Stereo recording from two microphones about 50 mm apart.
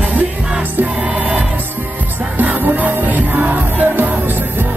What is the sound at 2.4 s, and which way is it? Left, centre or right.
Music, right.